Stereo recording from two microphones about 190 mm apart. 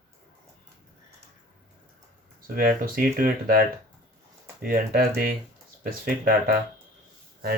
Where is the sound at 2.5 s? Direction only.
50° right (ahead or behind).